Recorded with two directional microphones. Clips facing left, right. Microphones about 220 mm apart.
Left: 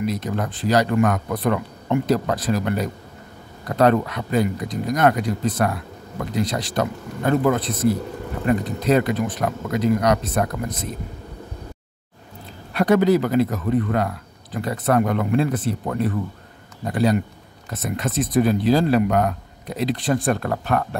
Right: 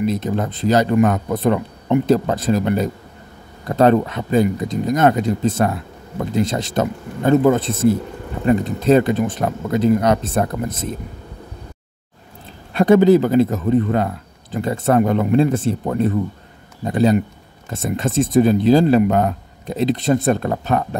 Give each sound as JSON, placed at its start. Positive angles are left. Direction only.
{"t": 0.0, "sound": "speech", "side_deg": -25}
{"t": 12.7, "sound": "speech", "side_deg": -25}